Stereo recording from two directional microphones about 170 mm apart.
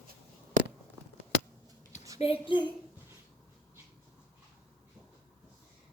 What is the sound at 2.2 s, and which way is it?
Speech, 30° left (ahead or behind).